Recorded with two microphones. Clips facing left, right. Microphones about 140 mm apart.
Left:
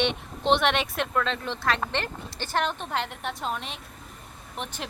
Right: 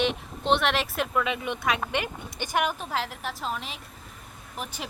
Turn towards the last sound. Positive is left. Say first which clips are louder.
# left 1 dB
turn(degrees=-5)  # may be behind; listen again after turning